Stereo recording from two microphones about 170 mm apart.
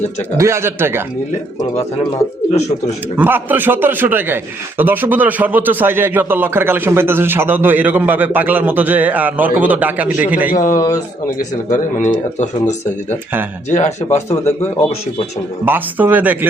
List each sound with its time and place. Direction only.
0.3 s a man's voice: 15° right (ahead or behind)
2.5 s speech: 40° left (ahead or behind)
3.2 s a man's voice: 10° right (ahead or behind)
10.5 s speech: 50° left (ahead or behind)
10.8 s speech: 20° left (ahead or behind)
11.7 s speech: 45° left (ahead or behind)
15.6 s a man's voice: 10° right (ahead or behind)